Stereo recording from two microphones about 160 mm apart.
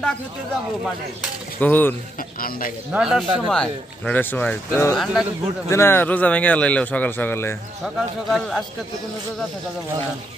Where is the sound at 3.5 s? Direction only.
5° left (ahead or behind).